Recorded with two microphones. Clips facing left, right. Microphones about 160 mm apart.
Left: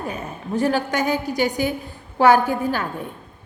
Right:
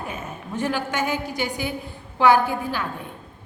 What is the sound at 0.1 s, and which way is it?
A woman's voice, 35° left (ahead or behind).